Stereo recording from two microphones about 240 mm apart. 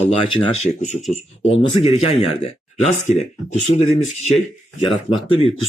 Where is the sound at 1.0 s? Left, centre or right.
Centre.